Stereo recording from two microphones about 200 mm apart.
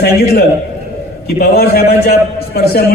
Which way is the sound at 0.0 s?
50° left (ahead or behind).